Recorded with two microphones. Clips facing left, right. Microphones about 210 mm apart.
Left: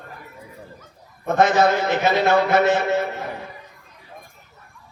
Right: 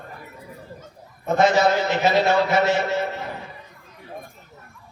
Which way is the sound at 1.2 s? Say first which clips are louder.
Left 1 dB; 50° left (ahead or behind).